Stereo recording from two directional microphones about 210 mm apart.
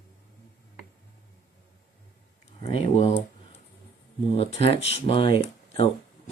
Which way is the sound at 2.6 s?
30° left (ahead or behind).